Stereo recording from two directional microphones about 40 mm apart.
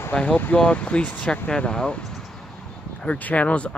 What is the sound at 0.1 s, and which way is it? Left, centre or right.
Speech, left.